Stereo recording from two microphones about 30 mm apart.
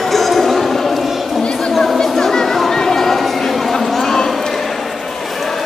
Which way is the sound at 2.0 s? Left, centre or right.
Centre.